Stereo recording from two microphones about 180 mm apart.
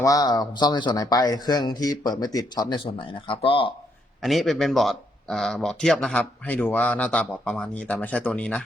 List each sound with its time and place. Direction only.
0.0 s a man's voice: 20° left (ahead or behind)
4.2 s speech: centre (ahead or behind)